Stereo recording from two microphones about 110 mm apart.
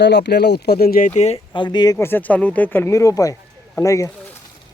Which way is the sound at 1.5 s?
45° left (ahead or behind).